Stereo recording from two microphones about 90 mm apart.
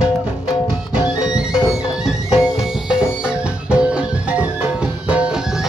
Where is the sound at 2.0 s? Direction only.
5° right (ahead or behind).